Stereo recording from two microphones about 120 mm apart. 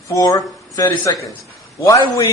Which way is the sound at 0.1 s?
30° left (ahead or behind).